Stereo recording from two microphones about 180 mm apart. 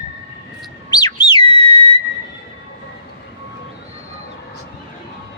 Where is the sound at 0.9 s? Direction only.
25° left (ahead or behind).